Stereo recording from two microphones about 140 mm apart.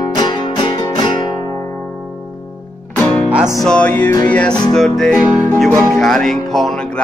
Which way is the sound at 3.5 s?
5° left (ahead or behind).